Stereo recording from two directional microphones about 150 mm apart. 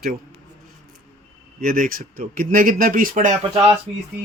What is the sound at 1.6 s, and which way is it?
Speech, 70° right (ahead or behind).